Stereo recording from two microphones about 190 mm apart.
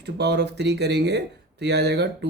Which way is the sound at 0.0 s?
60° right (ahead or behind).